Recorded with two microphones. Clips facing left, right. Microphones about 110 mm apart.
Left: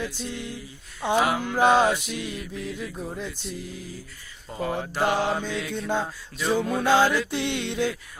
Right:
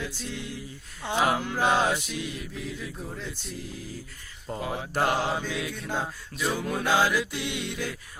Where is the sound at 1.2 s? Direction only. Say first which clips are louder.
Left 2 dB; 15° left (ahead or behind).